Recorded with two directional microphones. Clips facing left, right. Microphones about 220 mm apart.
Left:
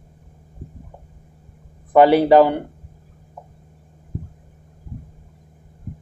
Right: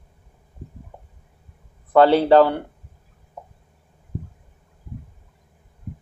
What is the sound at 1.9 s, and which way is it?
Speech, 15° left (ahead or behind).